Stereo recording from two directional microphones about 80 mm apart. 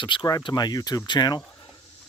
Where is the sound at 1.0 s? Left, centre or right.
Left.